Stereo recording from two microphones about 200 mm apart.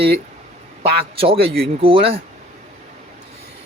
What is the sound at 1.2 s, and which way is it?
Speech, 30° right (ahead or behind).